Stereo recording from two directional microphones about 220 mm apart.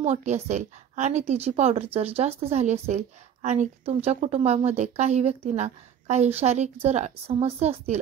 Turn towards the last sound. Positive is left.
turn(degrees=-30)  # may be behind; listen again after turning